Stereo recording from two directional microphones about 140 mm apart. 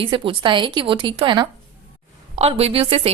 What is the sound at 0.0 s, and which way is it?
A woman's voice, 40° right (ahead or behind).